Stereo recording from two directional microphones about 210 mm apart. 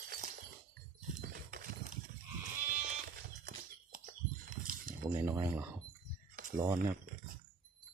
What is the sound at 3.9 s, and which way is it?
Bird flight, 40° right (ahead or behind).